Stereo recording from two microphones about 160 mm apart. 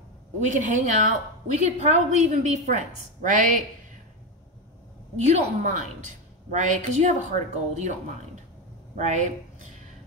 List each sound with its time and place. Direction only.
0.5 s a woman's voice: 50° right (ahead or behind)
5.2 s a woman's voice: 50° right (ahead or behind)
8.9 s speech: 50° right (ahead or behind)